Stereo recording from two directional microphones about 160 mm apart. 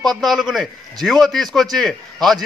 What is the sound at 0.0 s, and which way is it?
A man's voice, centre (ahead or behind).